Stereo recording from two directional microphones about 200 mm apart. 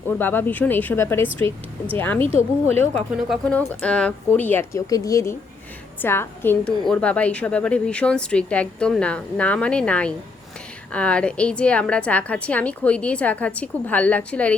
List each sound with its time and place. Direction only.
0.1 s a woman's voice: 10° left (ahead or behind)
2.2 s speech: 30° right (ahead or behind)
2.8 s a woman's voice: 5° left (ahead or behind)